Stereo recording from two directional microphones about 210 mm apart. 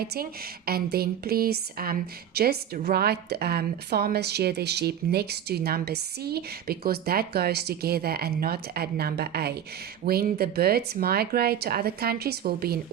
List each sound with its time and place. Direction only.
0.0 s speech: 45° right (ahead or behind)